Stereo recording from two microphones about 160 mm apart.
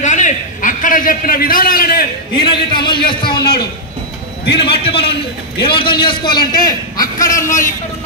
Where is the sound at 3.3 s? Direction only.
80° left.